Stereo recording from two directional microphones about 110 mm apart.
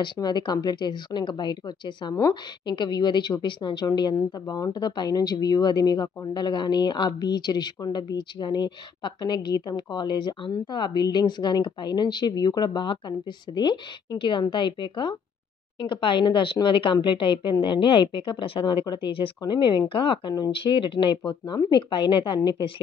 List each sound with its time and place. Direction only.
0.0 s a woman's voice: 40° left (ahead or behind)